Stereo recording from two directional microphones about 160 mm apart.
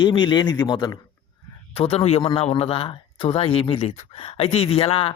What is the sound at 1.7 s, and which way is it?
A man's voice, 35° left (ahead or behind).